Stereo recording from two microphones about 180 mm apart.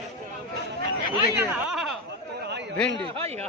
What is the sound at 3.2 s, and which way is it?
Speech, 35° right (ahead or behind).